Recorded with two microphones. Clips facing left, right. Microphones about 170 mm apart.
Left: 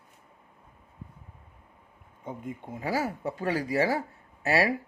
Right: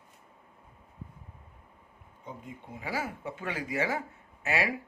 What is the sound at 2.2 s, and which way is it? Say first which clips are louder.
Speech: left 6 dB; 45° left (ahead or behind).